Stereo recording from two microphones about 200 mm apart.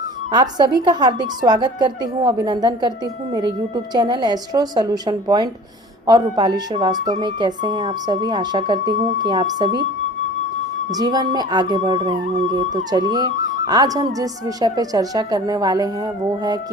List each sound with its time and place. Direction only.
0.3 s a woman's voice: 20° right (ahead or behind)
10.9 s a woman's voice: 20° right (ahead or behind)